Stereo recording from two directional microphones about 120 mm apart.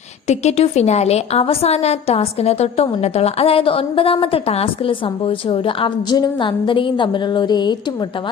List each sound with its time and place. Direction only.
0.3 s a woman's voice: 65° left (ahead or behind); by 7.8 s 40° left (ahead or behind)